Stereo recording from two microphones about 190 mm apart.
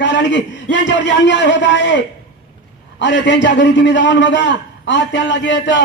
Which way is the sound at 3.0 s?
70° left (ahead or behind).